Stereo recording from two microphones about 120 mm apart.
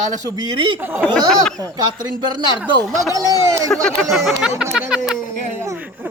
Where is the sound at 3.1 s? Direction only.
30° right (ahead or behind).